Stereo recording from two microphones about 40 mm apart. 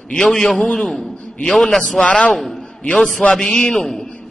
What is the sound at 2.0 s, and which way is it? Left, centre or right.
Speech, left.